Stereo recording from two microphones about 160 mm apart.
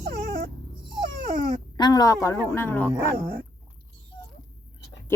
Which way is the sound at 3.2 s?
60° right (ahead or behind).